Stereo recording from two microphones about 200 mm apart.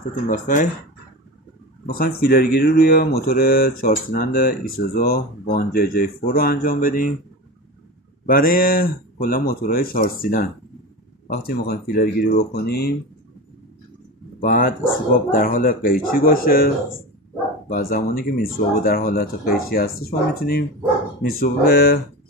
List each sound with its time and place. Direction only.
0.3 s speech: 40° left (ahead or behind)
1.9 s speech: 50° left (ahead or behind)
8.3 s speech: 45° left (ahead or behind)
14.4 s speech: 45° left (ahead or behind)